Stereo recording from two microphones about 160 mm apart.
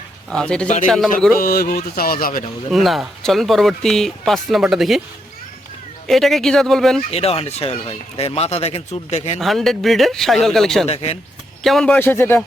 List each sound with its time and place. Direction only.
0.3 s speech: 5° left (ahead or behind)
1.4 s speech: 65° left (ahead or behind)
2.6 s speech: centre (ahead or behind)
6.1 s speech: centre (ahead or behind)
7.1 s speech: 40° left (ahead or behind)
9.4 s speech: centre (ahead or behind)
10.8 s speech: 40° left (ahead or behind)
11.6 s speech: centre (ahead or behind)
11.9 s speech: 15° left (ahead or behind)